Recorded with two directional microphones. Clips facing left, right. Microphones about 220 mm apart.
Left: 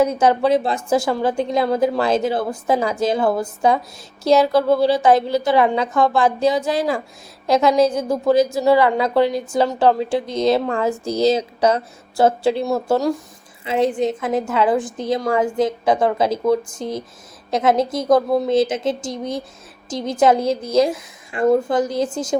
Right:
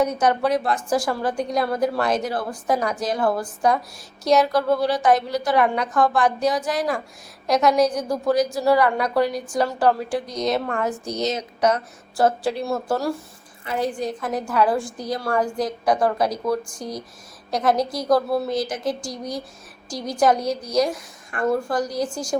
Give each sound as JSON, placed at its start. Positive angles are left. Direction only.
{"t": 0.0, "sound": "a woman's voice", "side_deg": 25}